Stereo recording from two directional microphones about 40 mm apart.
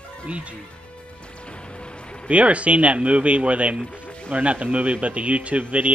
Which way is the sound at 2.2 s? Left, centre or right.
Right.